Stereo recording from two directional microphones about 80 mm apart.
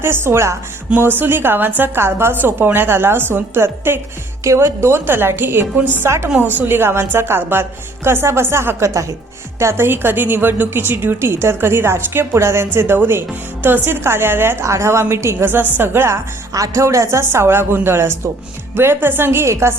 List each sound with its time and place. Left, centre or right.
0.0 s a woman's voice: right